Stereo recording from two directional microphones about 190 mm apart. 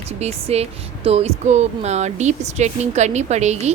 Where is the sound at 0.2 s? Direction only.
30° right (ahead or behind).